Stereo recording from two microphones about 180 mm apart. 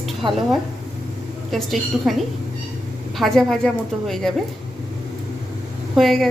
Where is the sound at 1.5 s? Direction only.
Centre (ahead or behind).